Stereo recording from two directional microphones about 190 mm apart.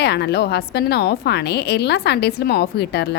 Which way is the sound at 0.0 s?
60° left (ahead or behind).